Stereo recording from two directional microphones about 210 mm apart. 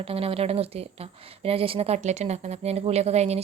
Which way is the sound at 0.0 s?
25° right (ahead or behind).